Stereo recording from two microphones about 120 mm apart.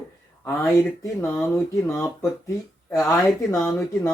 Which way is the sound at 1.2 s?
20° left (ahead or behind).